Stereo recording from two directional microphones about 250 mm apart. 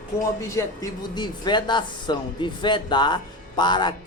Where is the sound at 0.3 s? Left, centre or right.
Centre.